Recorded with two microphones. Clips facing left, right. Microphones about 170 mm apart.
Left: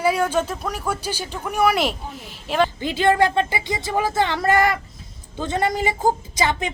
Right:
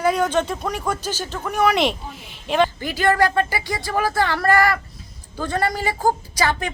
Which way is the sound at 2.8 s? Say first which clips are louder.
Left 1 dB; 20° left (ahead or behind).